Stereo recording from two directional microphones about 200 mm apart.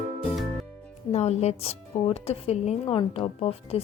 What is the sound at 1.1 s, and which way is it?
Speech, 30° left (ahead or behind).